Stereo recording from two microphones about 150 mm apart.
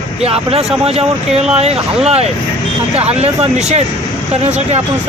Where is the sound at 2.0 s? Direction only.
45° right (ahead or behind).